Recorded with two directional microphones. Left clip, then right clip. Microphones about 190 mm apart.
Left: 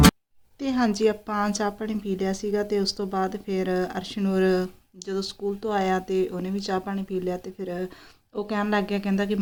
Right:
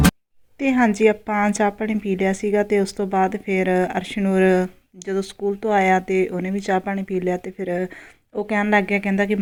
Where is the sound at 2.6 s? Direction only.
25° right (ahead or behind).